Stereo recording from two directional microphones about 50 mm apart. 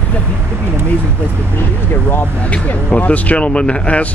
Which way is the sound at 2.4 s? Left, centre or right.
Left.